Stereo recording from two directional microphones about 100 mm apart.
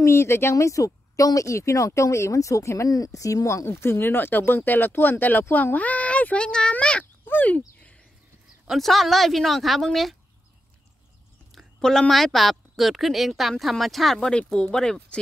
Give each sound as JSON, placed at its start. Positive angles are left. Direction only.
{"t": 0.0, "sound": "speech", "side_deg": 25}
{"t": 7.2, "sound": "a sound", "side_deg": 15}
{"t": 8.6, "sound": "a woman's voice", "side_deg": 0}
{"t": 11.5, "sound": "a woman's voice", "side_deg": 5}